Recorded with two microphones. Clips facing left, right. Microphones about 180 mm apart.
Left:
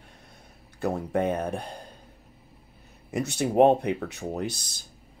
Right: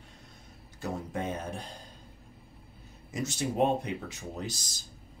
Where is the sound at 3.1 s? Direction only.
60° left (ahead or behind).